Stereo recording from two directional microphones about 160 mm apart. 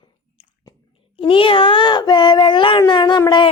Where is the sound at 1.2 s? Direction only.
35° left (ahead or behind).